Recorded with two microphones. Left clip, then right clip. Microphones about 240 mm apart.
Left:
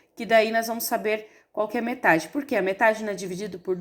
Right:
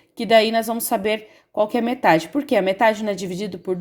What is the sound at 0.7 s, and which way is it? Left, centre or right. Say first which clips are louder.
Speech: right 4 dB; right.